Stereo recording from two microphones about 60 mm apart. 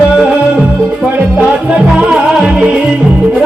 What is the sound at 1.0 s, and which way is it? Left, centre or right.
Music, right.